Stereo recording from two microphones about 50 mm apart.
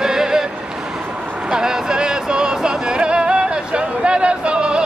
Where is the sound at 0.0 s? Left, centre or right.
Centre.